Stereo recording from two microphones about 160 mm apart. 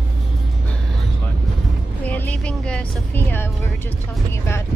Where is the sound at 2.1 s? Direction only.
10° left (ahead or behind).